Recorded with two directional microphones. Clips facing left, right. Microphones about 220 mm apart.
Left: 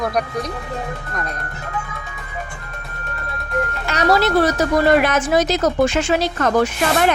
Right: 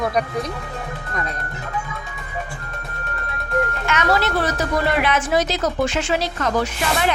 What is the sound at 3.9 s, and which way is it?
Speech, 35° left (ahead or behind).